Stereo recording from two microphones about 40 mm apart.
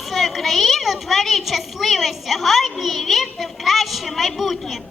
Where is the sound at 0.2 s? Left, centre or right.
Centre.